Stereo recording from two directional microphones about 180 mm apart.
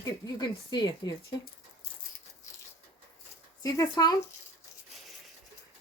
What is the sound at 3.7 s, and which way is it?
Speech, 25° left (ahead or behind).